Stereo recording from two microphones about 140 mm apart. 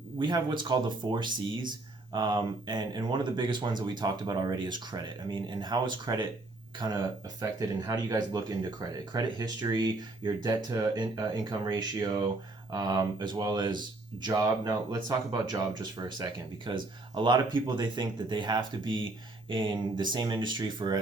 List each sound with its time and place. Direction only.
0.2 s speech: 35° right (ahead or behind)